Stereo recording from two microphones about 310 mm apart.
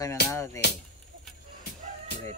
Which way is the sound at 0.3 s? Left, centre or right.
Centre.